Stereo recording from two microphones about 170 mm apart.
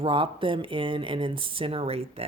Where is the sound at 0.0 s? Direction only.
30° right (ahead or behind).